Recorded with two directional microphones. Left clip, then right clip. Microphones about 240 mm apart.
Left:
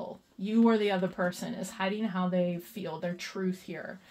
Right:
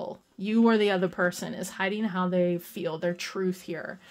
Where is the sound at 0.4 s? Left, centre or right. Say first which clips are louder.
Right 3 dB; right.